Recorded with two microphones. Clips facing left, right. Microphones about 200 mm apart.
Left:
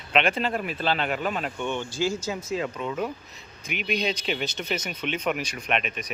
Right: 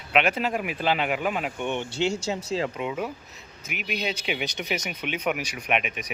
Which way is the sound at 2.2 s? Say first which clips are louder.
Right 1 dB; 30° right (ahead or behind).